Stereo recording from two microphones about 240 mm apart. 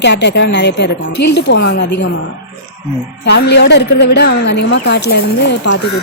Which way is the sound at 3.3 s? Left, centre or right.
Left.